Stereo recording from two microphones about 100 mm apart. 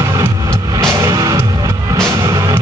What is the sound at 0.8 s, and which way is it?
Music, 35° right (ahead or behind).